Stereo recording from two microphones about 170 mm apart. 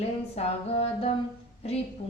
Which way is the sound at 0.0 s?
35° left (ahead or behind).